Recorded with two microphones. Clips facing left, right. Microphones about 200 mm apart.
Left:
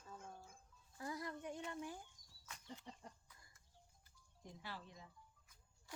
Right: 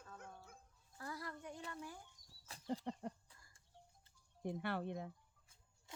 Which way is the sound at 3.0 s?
65° right (ahead or behind).